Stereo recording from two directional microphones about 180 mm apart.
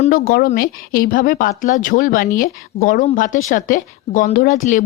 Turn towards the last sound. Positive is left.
turn(degrees=45)  # may be behind; listen again after turning